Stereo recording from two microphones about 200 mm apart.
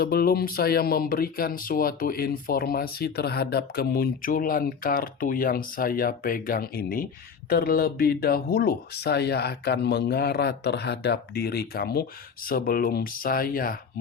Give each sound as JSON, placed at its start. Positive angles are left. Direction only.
{"t": 0.0, "sound": "speech", "side_deg": 50}